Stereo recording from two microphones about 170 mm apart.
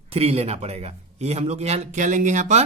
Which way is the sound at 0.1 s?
35° right (ahead or behind).